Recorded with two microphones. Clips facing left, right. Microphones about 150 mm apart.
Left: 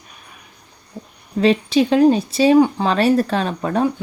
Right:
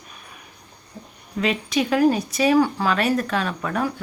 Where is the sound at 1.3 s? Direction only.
30° left (ahead or behind).